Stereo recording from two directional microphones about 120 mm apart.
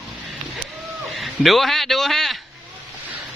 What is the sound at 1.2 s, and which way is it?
Speech, centre (ahead or behind).